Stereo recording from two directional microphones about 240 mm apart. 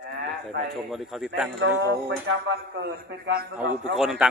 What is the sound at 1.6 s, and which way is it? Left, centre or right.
A man's voice, right.